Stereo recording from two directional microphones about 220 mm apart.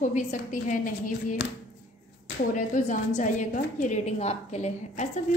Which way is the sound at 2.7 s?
35° left (ahead or behind).